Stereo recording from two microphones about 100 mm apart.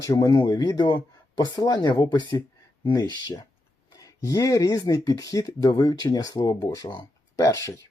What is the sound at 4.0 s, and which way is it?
Speech, 35° left (ahead or behind).